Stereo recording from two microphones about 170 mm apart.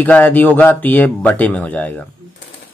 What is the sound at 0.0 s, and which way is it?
Speech, 10° left (ahead or behind).